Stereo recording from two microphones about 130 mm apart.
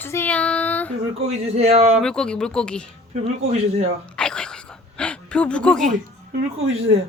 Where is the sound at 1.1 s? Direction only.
55° right (ahead or behind).